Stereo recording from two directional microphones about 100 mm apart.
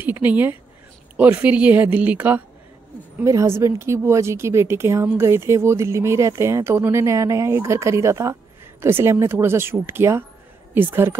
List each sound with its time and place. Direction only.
0.0 s speech: 20° right (ahead or behind)
3.3 s a woman's voice: 30° right (ahead or behind)